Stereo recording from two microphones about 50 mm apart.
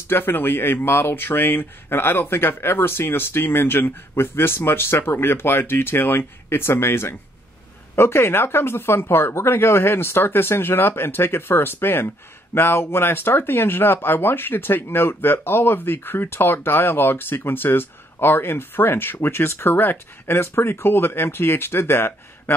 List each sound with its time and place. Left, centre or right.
0.1 s speech: left